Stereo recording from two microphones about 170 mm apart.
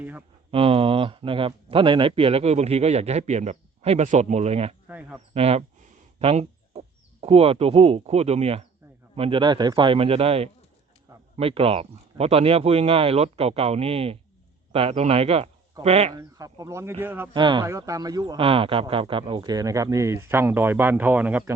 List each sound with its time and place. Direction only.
0.0 s speech: 10° right (ahead or behind)
0.5 s speech: 35° right (ahead or behind)
4.9 s speech: 5° right (ahead or behind)
5.3 s speech: 35° right (ahead or behind)
16.1 s speech: 20° right (ahead or behind)
17.3 s speech: 25° right (ahead or behind); by 21.5 s 10° right (ahead or behind)